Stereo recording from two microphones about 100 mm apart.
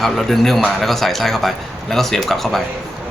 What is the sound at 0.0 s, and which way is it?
Speech, centre (ahead or behind).